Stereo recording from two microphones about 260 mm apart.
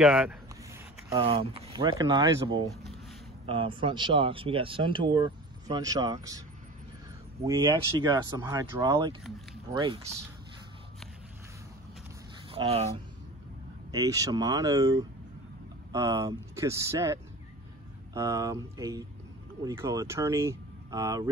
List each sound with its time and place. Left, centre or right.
0.0 s speech: centre
1.1 s speech: right
7.4 s speech: centre
12.4 s speech: right
13.9 s speech: centre